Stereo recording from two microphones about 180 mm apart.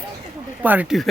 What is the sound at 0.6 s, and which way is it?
Speech, 10° right (ahead or behind).